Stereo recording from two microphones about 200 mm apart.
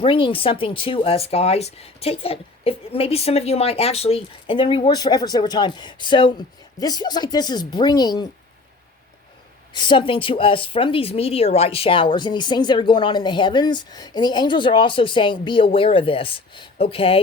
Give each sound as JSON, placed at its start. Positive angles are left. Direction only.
{"t": 0.0, "sound": "speech", "side_deg": 25}
{"t": 9.7, "sound": "speech", "side_deg": 25}